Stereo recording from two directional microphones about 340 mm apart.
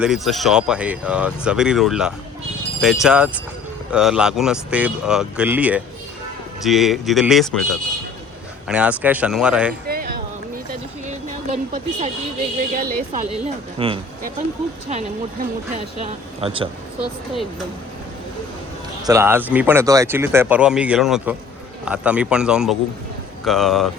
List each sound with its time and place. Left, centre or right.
0.0 s speech: centre
8.6 s speech: centre
9.8 s a sound: right
12.7 s speech: right
15.7 s speech: centre
19.0 s speech: centre